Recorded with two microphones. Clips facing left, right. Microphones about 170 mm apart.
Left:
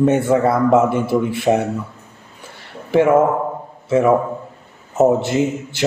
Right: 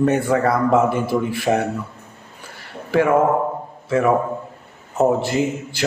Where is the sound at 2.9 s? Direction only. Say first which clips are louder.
Left 3 dB; 20° left (ahead or behind).